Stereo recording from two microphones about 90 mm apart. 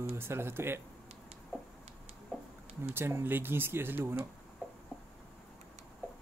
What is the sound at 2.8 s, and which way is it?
Speech, 25° right (ahead or behind).